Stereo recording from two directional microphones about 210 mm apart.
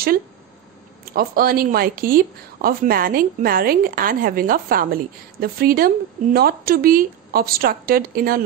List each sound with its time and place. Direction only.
1.0 s speech: 45° right (ahead or behind)